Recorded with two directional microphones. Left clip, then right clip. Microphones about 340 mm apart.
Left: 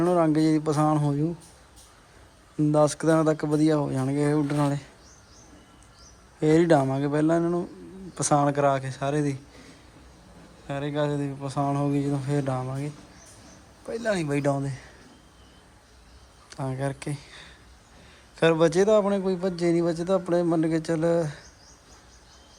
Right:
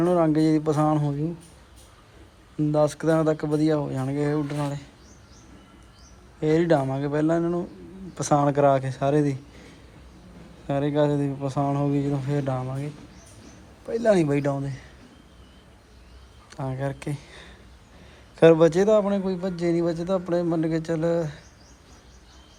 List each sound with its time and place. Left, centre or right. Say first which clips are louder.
0.0 s a man's voice: right 1 dB; centre
2.6 s a man's voice: left 1 dB; centre
6.4 s a man's voice: left 1 dB; centre
10.7 s a man's voice: right 5 dB; centre
16.6 s a man's voice: even; centre